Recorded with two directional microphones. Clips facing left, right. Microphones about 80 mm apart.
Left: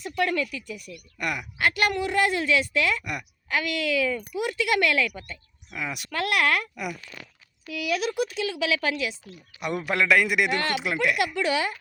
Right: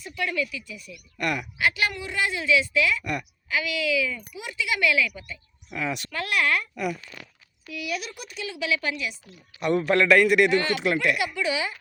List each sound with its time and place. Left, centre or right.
0.0 s speech: left
1.2 s a man's voice: centre
1.5 s speech: left
3.0 s a man's voice: centre
3.5 s speech: left
5.7 s a man's voice: centre
6.1 s speech: left
7.7 s a woman's voice: left
9.6 s a man's voice: centre
10.5 s speech: left
10.8 s speech: centre
11.3 s speech: left